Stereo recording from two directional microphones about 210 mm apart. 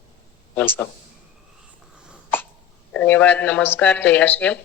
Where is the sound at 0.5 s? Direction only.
10° left (ahead or behind).